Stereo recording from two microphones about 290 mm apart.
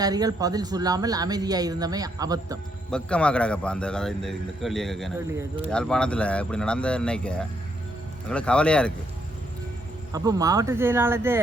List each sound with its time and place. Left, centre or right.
0.0 s a man's voice: centre
2.9 s a man's voice: centre
10.1 s a man's voice: centre